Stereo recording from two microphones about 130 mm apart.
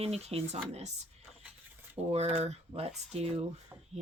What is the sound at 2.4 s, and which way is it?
Speech, 55° right (ahead or behind).